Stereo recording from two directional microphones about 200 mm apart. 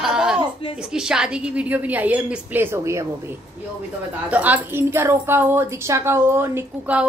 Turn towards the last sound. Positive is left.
turn(degrees=-10)  # may be behind; listen again after turning